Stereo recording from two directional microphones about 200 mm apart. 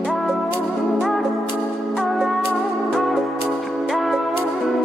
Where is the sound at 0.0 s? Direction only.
Centre (ahead or behind).